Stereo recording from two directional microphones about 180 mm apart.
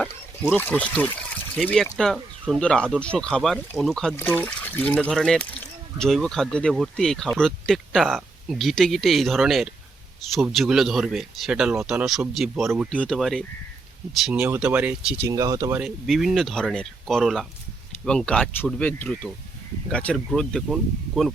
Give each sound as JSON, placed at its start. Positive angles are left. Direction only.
{"t": 0.5, "sound": "speech", "side_deg": 10}
{"t": 15.3, "sound": "speech", "side_deg": -20}
{"t": 15.8, "sound": "speech", "side_deg": 0}